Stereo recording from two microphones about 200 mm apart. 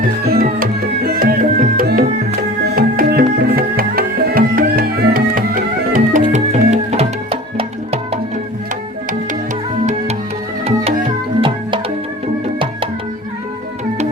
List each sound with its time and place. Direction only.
0.3 s music: 50° right (ahead or behind); by 7.3 s 30° right (ahead or behind)
10.7 s music: 30° right (ahead or behind)